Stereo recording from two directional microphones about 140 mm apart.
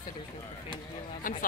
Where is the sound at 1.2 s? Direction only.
75° left (ahead or behind).